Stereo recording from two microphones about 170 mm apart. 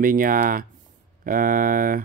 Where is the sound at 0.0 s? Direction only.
55° right (ahead or behind).